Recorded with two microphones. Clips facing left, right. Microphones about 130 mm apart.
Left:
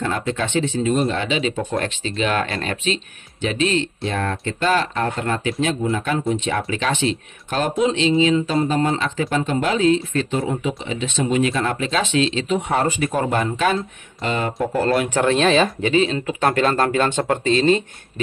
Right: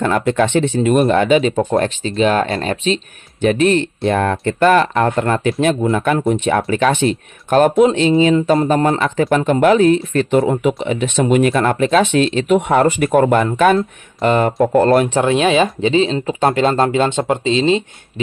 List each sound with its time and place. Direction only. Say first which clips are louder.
0.0 s speech: right 8 dB; 60° right (ahead or behind); by 3.0 s 35° right (ahead or behind)
3.3 s speech: right 7 dB; 55° right (ahead or behind)
15.0 s speech: right 3 dB; 25° right (ahead or behind)
15.3 s speech: right 2 dB; 15° right (ahead or behind)
15.8 s speech: right 4 dB; 25° right (ahead or behind)